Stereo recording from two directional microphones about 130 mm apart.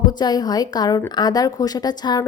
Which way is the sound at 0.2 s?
30° left (ahead or behind).